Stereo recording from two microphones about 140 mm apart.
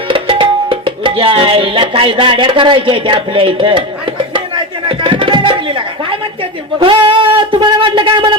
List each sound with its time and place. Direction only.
0.1 s music: 40° right (ahead or behind)
4.4 s a sound: 35° right (ahead or behind)
6.7 s speech: 35° right (ahead or behind)